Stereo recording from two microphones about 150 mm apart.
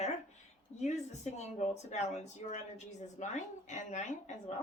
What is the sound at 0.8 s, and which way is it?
Speech, 50° left (ahead or behind).